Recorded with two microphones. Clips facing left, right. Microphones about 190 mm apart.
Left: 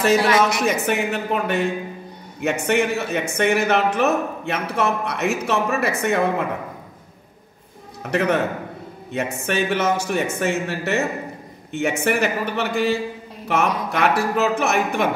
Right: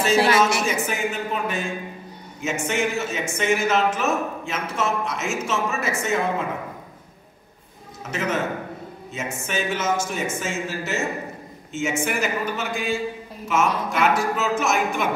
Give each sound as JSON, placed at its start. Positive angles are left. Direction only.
{"t": 0.1, "sound": "speech", "side_deg": -30}
{"t": 0.4, "sound": "speech", "side_deg": 65}
{"t": 8.0, "sound": "speech", "side_deg": 65}